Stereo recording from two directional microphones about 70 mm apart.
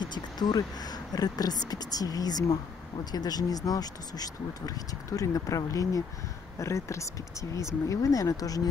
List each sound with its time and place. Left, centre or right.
0.0 s speech: left